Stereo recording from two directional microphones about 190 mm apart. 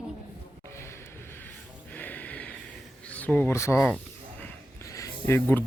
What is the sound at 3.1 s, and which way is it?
Speech, 10° left (ahead or behind).